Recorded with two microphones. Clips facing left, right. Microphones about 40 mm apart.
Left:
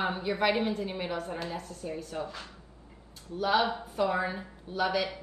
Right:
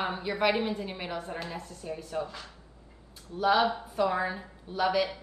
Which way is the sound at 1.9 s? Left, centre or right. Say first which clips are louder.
Right 3 dB; right.